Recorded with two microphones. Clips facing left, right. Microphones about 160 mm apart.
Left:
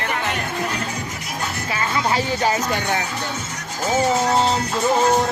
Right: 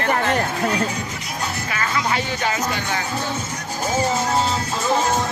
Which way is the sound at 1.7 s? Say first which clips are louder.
Left 2 dB; 30° left (ahead or behind).